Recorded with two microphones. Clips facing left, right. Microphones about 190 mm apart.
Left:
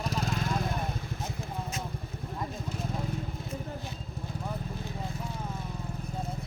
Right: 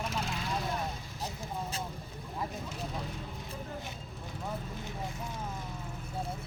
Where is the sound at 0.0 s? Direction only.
40° left (ahead or behind).